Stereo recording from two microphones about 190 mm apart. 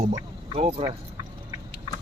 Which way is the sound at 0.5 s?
30° right (ahead or behind).